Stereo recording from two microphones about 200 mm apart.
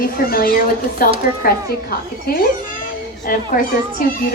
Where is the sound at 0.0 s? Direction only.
45° left (ahead or behind).